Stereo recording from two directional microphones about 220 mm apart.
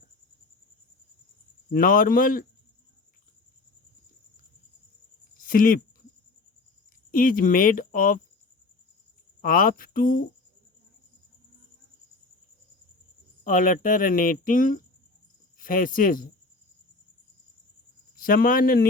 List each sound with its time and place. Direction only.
1.7 s speech: 40° left (ahead or behind)
5.4 s a sound: 40° left (ahead or behind)
7.1 s speech: 40° left (ahead or behind)
9.4 s speech: 40° left (ahead or behind)
13.4 s speech: 40° left (ahead or behind)
18.2 s speech: 40° left (ahead or behind)